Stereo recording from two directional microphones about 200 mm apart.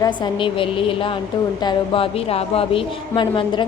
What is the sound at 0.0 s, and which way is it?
A woman's voice, 25° left (ahead or behind).